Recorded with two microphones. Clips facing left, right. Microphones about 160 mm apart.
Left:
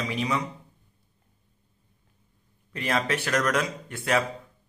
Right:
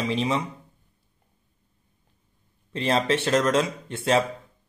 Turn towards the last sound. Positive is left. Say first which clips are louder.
# right 4 dB
turn(degrees=-25)  # may be behind; listen again after turning